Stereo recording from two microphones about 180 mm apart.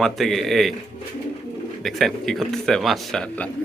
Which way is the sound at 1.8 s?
Centre (ahead or behind).